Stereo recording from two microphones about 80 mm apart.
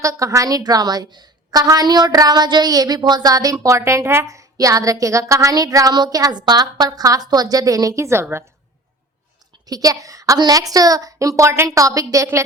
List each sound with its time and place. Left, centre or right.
0.0 s a woman's voice: right
9.6 s a woman's voice: right